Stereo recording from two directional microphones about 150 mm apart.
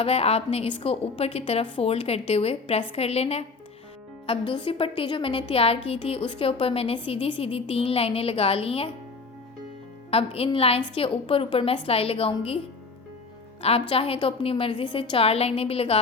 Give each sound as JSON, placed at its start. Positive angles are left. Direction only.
{"t": 0.0, "sound": "a woman's voice", "side_deg": 40}
{"t": 10.1, "sound": "a woman's voice", "side_deg": 40}
{"t": 13.6, "sound": "a woman's voice", "side_deg": 40}